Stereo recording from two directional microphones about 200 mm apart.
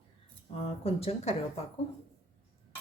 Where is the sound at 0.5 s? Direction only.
30° left (ahead or behind).